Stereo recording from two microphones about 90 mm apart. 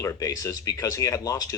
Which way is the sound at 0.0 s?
35° left (ahead or behind).